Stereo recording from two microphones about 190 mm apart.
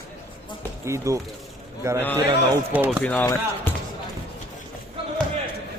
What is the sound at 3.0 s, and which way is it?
Speech, 10° left (ahead or behind).